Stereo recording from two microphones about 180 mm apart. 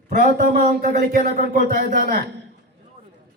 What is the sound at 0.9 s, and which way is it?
A man's voice, 45° right (ahead or behind).